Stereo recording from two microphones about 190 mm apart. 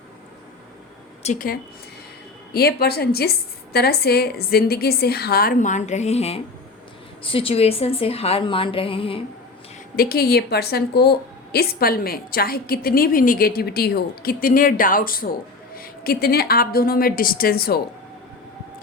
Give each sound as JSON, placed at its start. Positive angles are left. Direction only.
{"t": 1.2, "sound": "speech", "side_deg": 40}
{"t": 2.5, "sound": "a woman's voice", "side_deg": 55}
{"t": 9.9, "sound": "a woman's voice", "side_deg": 50}